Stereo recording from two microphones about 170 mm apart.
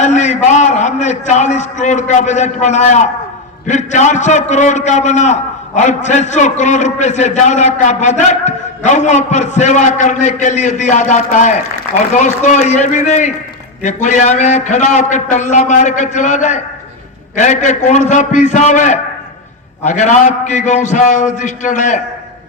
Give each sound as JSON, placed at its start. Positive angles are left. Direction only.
{"t": 0.0, "sound": "a man's voice", "side_deg": 45}